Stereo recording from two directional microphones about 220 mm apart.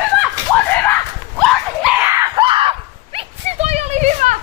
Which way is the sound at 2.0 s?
15° right (ahead or behind).